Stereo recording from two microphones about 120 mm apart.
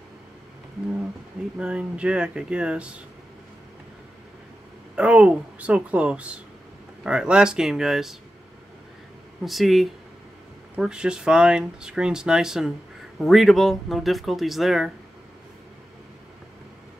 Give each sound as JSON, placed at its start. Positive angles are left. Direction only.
{"t": 1.6, "sound": "speech", "side_deg": -10}
{"t": 4.9, "sound": "speech", "side_deg": -10}
{"t": 9.4, "sound": "speech", "side_deg": 0}